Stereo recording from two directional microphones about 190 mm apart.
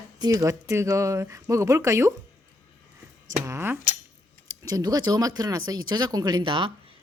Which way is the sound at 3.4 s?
10° right (ahead or behind).